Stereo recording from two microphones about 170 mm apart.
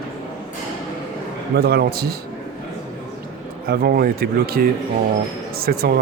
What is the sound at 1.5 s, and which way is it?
Speech, 70° right (ahead or behind).